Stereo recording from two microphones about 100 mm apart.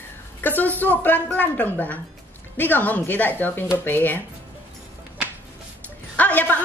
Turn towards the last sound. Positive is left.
turn(degrees=15)  # may be behind; listen again after turning